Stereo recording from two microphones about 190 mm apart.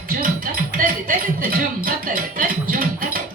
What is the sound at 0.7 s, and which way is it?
Music, 45° right (ahead or behind).